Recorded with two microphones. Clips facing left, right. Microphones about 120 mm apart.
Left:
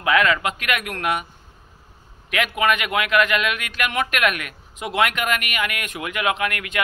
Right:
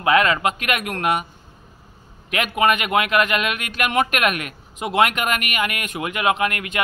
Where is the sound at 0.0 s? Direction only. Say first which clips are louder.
Right 2 dB; 35° right (ahead or behind).